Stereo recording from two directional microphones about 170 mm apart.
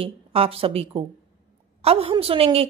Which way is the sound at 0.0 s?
35° right (ahead or behind).